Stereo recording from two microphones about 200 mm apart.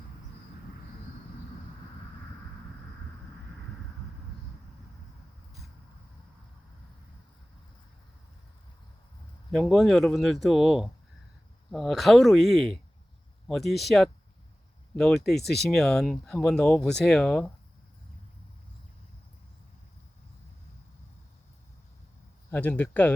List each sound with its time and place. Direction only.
9.5 s speech: centre (ahead or behind)
15.4 s speech: 55° left (ahead or behind)
15.7 s speech: 5° left (ahead or behind)
22.4 s speech: 10° left (ahead or behind)